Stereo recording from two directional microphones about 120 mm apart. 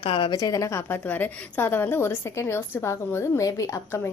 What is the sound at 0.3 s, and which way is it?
A woman's voice, 30° left (ahead or behind).